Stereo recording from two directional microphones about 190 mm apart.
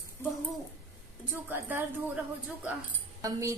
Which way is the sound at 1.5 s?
10° right (ahead or behind).